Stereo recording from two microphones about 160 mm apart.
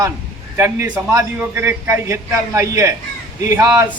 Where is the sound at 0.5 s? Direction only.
15° right (ahead or behind).